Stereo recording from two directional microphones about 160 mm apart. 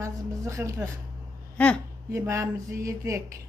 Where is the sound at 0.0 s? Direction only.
20° right (ahead or behind).